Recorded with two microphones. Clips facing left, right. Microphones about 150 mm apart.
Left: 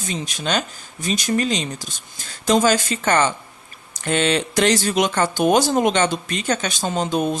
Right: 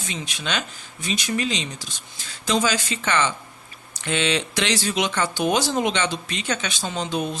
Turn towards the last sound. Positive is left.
turn(degrees=45)  # may be behind; listen again after turning